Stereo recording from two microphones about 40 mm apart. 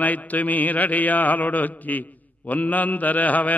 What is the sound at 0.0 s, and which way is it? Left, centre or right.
Mantra, left.